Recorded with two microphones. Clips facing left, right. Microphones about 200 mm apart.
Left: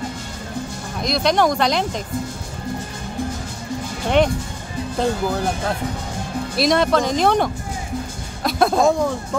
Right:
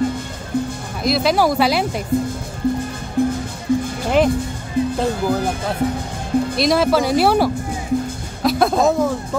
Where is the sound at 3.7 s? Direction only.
55° right (ahead or behind).